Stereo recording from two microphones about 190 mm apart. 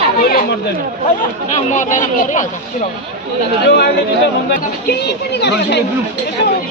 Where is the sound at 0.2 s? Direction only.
50° left (ahead or behind).